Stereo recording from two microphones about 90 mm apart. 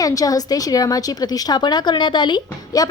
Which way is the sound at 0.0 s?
40° left (ahead or behind).